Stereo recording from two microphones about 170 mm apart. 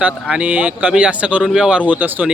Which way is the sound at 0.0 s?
5° right (ahead or behind).